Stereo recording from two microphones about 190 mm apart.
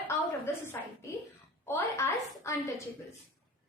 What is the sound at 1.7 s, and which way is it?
Speech, 15° left (ahead or behind).